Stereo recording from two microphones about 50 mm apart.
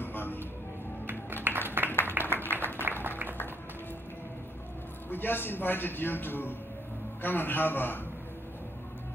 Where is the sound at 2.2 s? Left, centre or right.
Left.